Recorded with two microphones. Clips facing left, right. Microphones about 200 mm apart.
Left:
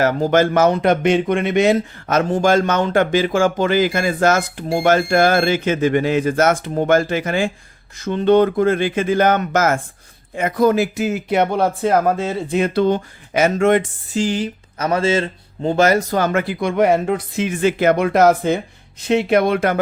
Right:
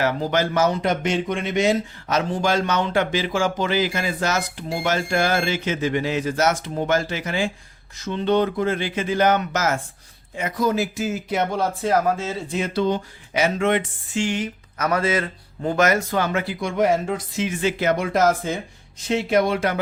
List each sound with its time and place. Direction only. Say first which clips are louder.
0.0 s speech: left 6 dB; 45° left (ahead or behind)